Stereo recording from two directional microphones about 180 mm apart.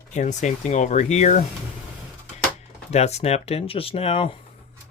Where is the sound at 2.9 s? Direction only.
35° left (ahead or behind).